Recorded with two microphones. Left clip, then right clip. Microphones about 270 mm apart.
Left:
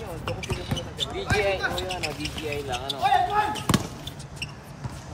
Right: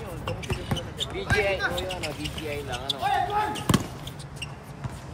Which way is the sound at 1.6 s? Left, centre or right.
Centre.